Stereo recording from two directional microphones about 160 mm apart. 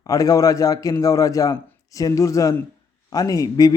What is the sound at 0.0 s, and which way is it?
A man's voice, 20° left (ahead or behind).